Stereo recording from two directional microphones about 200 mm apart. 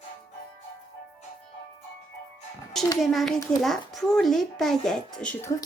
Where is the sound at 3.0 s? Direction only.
Centre (ahead or behind).